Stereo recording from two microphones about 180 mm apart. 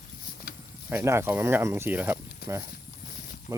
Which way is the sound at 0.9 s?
15° right (ahead or behind).